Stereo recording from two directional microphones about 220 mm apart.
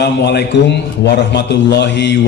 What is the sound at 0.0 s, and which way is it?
A man's voice, 50° left (ahead or behind).